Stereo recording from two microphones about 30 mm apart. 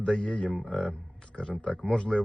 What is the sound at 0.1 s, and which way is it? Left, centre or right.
Speech, left.